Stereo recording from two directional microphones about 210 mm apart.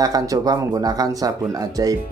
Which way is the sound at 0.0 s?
15° right (ahead or behind).